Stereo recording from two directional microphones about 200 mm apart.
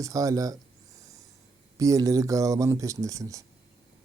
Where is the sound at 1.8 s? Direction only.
15° right (ahead or behind).